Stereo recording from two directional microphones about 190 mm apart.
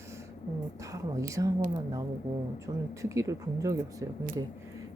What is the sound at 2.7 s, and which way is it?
Speech, 20° right (ahead or behind).